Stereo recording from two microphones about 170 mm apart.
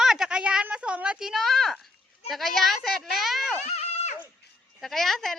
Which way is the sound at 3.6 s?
40° left (ahead or behind).